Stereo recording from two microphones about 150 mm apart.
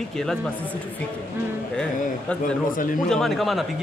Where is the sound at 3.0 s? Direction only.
5° left (ahead or behind).